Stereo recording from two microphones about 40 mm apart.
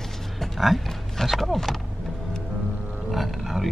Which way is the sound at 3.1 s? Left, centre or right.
Centre.